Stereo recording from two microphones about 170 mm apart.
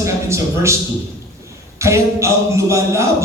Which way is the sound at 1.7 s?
15° right (ahead or behind).